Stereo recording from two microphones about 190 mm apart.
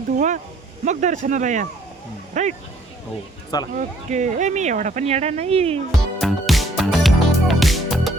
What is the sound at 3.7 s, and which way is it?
Speech, 40° right (ahead or behind).